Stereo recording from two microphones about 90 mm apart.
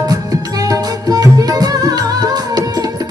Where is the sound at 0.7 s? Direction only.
40° right (ahead or behind).